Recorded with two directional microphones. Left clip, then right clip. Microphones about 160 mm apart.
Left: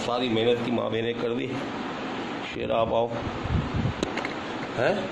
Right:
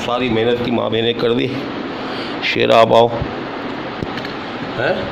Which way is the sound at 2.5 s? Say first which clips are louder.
Right 15 dB; 45° right (ahead or behind).